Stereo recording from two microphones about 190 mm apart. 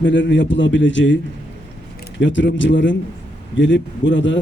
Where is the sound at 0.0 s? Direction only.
70° left (ahead or behind).